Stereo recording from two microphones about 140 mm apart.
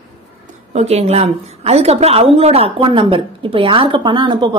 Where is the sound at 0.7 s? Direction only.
50° right (ahead or behind).